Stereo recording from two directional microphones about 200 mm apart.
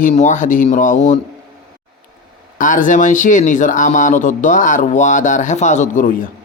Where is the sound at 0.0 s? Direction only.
35° left (ahead or behind).